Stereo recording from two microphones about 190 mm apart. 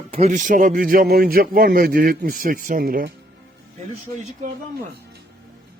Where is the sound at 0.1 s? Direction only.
40° right (ahead or behind).